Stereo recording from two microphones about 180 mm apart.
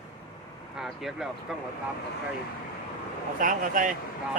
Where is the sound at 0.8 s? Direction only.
Centre (ahead or behind).